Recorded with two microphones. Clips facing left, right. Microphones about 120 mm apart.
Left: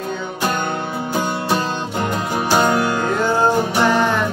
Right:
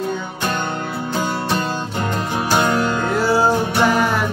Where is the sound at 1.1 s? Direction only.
15° left (ahead or behind).